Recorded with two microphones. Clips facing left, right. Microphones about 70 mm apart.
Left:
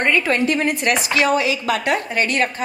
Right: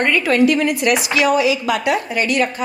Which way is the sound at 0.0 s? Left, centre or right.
Left.